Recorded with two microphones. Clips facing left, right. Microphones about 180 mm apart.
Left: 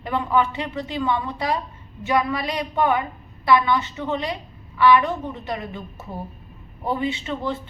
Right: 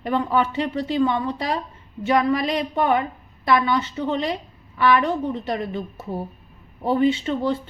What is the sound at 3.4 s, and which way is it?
Speech, 45° right (ahead or behind).